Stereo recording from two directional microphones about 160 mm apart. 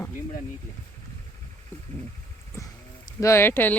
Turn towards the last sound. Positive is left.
turn(degrees=15)  # may be behind; listen again after turning